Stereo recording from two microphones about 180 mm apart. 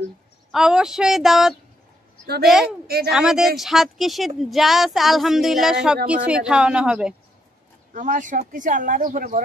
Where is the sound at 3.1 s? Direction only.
5° right (ahead or behind).